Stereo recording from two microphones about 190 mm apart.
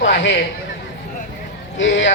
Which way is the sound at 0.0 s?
70° left (ahead or behind).